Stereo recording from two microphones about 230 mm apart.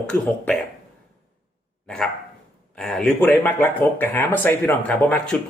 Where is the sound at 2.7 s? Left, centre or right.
Centre.